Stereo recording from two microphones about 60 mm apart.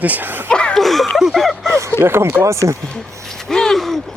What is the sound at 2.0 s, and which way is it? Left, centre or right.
Speech, right.